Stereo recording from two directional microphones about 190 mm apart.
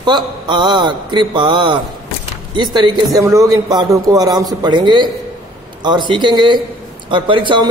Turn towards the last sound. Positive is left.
turn(degrees=-25)  # may be behind; listen again after turning